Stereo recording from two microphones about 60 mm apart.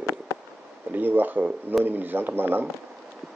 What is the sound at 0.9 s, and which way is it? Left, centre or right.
Speech, right.